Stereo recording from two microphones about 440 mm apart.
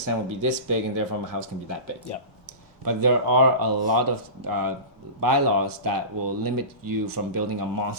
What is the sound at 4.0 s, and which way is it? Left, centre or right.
Speech, right.